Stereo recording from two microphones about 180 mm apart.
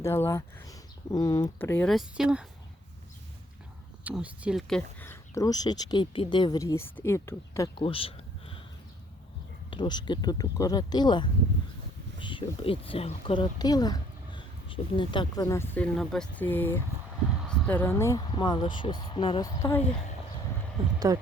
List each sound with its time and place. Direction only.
0.0 s speech: 15° left (ahead or behind)
1.9 s speech: centre (ahead or behind)
4.0 s speech: 5° right (ahead or behind)
4.9 s speech: 15° left (ahead or behind)
7.9 s a sound: 30° left (ahead or behind)
9.6 s speech: 25° left (ahead or behind)
21.1 s speech: 20° right (ahead or behind)